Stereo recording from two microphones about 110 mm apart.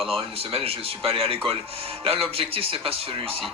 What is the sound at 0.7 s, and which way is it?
Speech, 60° right (ahead or behind).